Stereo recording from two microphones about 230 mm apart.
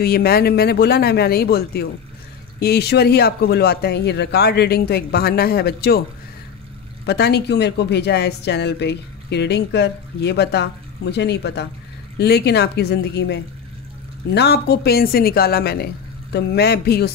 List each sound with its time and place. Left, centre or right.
0.0 s speech: left
7.1 s speech: left